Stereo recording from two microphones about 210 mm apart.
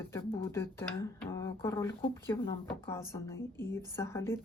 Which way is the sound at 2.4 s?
25° left (ahead or behind).